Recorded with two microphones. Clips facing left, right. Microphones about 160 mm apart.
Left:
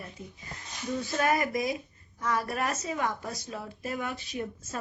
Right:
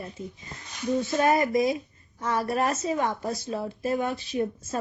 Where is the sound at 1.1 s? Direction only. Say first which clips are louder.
Right 4 dB; 25° right (ahead or behind).